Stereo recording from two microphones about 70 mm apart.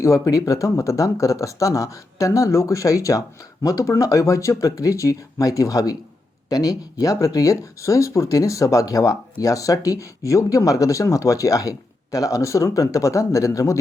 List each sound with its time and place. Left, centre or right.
0.0 s speech: left